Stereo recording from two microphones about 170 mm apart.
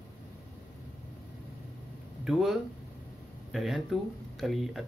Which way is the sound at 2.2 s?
Centre (ahead or behind).